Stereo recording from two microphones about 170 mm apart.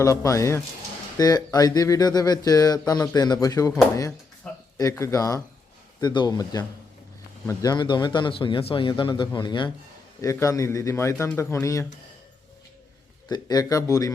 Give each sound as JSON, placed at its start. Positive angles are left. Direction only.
{"t": 0.0, "sound": "a man's voice", "side_deg": 20}
{"t": 4.4, "sound": "a sound", "side_deg": 5}
{"t": 4.8, "sound": "a man's voice", "side_deg": 20}
{"t": 13.2, "sound": "speech", "side_deg": 25}